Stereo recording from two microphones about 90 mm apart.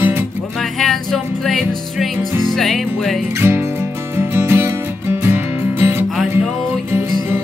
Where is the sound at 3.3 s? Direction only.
30° right (ahead or behind).